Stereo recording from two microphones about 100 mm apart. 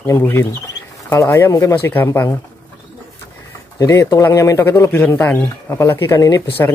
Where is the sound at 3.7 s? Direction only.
35° left (ahead or behind).